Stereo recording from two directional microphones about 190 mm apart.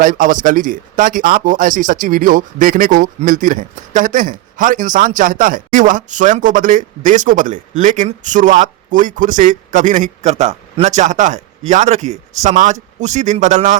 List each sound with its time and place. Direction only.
0.0 s a man's voice: 45° right (ahead or behind)